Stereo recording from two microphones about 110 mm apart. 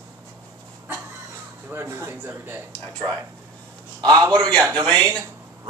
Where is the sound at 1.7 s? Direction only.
25° right (ahead or behind).